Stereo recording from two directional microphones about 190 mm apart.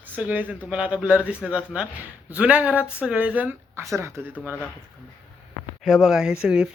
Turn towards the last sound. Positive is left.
turn(degrees=-5)  # may be behind; listen again after turning